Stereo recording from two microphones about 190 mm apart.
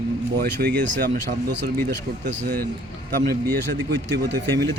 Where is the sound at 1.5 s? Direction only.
70° right (ahead or behind).